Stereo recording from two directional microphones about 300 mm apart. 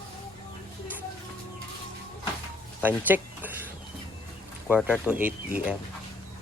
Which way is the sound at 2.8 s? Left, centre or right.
Centre.